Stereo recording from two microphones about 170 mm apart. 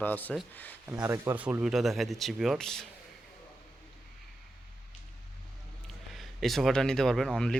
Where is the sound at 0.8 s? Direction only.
15° right (ahead or behind); by 2.9 s 5° left (ahead or behind).